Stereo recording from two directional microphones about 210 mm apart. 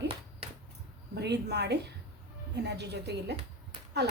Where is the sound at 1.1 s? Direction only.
55° right (ahead or behind).